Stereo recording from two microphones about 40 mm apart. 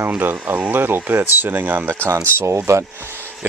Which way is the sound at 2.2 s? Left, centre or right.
Right.